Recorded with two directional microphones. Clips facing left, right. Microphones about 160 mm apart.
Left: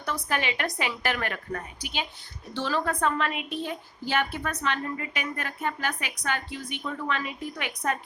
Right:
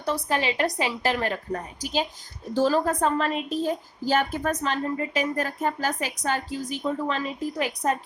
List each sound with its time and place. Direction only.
0.0 s a woman's voice: 30° right (ahead or behind)